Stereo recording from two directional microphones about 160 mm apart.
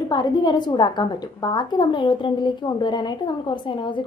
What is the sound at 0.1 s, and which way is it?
A woman's voice, 25° left (ahead or behind).